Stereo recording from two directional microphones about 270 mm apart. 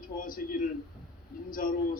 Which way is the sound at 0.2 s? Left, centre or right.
Left.